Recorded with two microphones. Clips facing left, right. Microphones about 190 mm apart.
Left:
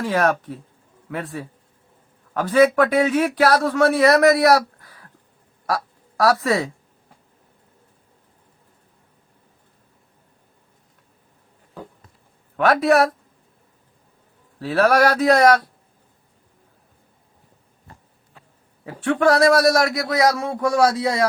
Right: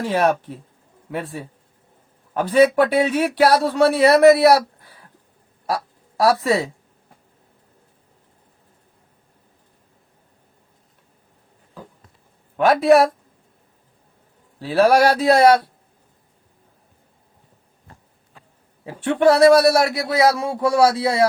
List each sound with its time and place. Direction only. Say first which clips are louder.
0.1 s a man's voice: right 2 dB; 30° right (ahead or behind)
12.5 s a man's voice: right 3 dB; 30° right (ahead or behind)
14.7 s a man's voice: right 2 dB; 30° right (ahead or behind)
18.9 s a man's voice: right 2 dB; 30° right (ahead or behind)